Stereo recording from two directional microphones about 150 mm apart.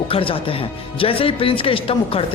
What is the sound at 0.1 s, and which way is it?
Speech, 35° left (ahead or behind).